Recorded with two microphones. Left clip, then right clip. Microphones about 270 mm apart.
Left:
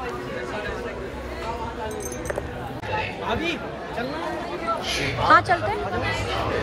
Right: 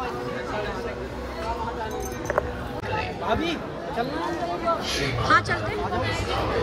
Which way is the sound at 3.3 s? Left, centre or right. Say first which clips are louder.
Right 1 dB; right.